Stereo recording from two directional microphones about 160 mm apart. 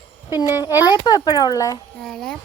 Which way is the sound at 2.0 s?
5° left (ahead or behind).